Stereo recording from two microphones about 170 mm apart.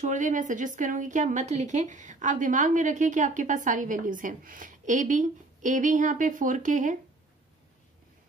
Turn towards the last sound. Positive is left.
turn(degrees=-50)  # may be behind; listen again after turning